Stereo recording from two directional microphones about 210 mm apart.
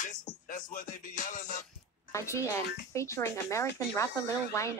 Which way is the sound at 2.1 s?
15° left (ahead or behind).